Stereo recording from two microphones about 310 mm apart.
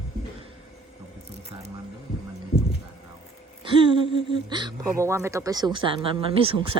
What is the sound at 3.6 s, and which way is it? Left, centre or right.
Speech, centre.